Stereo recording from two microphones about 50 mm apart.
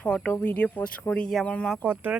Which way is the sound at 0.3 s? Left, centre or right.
Left.